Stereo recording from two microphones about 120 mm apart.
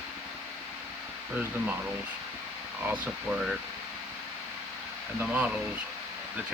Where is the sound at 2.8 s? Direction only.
10° right (ahead or behind).